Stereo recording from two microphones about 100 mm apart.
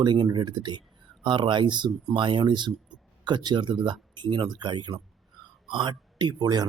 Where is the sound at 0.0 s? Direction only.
50° right (ahead or behind).